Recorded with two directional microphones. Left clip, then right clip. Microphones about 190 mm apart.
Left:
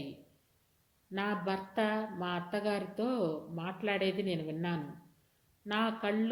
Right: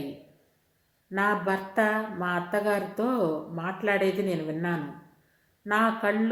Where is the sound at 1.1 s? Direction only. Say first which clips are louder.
Right 9 dB; 30° left (ahead or behind).